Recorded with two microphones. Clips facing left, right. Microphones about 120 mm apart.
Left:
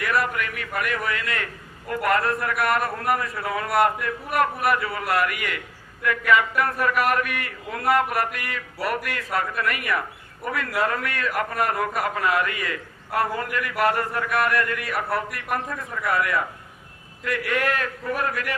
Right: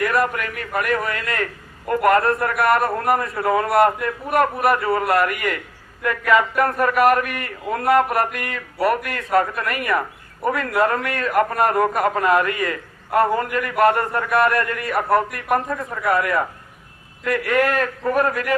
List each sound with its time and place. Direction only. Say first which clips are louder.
0.0 s a man's voice: right 4 dB; 45° right (ahead or behind)
2.4 s a man's voice: right 5 dB; 45° right (ahead or behind)
3.3 s a man's voice: right 8 dB; 55° right (ahead or behind)
3.8 s a man's voice: right 4 dB; 40° right (ahead or behind)
4.8 s a man's voice: right 9 dB; 55° right (ahead or behind)
5.2 s a man's voice: right 5 dB; 40° right (ahead or behind)